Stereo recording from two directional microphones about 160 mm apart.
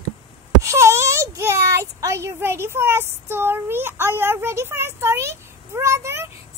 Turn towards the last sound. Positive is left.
turn(degrees=-15)  # may be behind; listen again after turning